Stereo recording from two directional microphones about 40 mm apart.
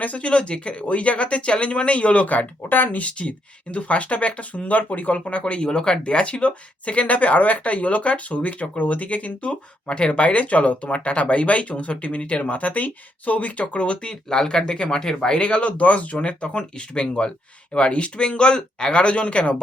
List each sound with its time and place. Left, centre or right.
0.0 s speech: left
3.0 s speech: left
15.4 s speech: left